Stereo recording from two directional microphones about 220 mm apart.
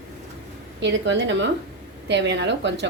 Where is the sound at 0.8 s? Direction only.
55° right (ahead or behind).